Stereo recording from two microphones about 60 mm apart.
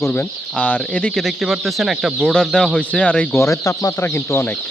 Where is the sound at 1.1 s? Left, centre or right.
Centre.